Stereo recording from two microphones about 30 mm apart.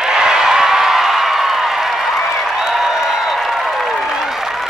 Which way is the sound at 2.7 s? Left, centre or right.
Centre.